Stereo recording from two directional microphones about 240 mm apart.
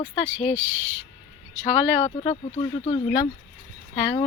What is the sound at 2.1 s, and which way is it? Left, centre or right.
Speech, left.